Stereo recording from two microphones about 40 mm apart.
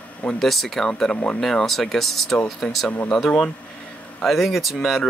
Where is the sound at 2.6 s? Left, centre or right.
Centre.